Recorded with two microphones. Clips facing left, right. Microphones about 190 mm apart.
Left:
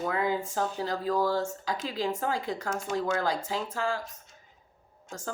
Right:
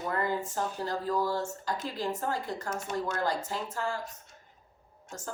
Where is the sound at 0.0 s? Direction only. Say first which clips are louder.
Left 2 dB; 75° left (ahead or behind).